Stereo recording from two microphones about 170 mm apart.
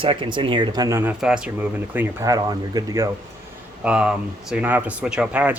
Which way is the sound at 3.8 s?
5° right (ahead or behind).